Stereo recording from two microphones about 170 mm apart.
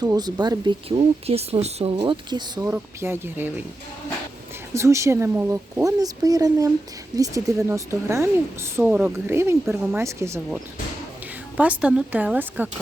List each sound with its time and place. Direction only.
0.0 s speech: 25° right (ahead or behind)
2.6 s a woman's voice: 15° right (ahead or behind)
4.7 s a woman's voice: 15° right (ahead or behind)